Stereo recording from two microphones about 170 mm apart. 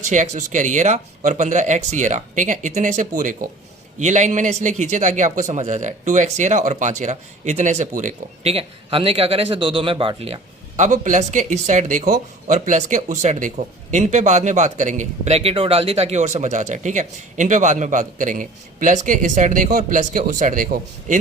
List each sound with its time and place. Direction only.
0.1 s a man's voice: 45° right (ahead or behind)